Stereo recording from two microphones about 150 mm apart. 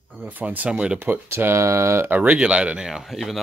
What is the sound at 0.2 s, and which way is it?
Speech, 10° right (ahead or behind).